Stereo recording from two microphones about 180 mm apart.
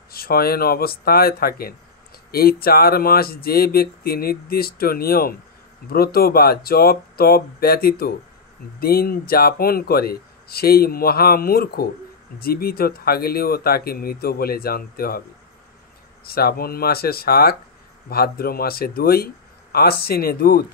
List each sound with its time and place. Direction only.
0.1 s speech: 55° left (ahead or behind)
16.3 s speech: 60° left (ahead or behind)